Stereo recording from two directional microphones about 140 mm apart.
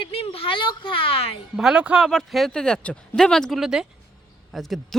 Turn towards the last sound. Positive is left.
turn(degrees=0)  # may be behind; listen again after turning